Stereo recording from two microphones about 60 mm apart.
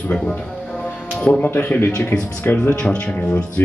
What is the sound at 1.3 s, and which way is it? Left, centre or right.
Speech, left.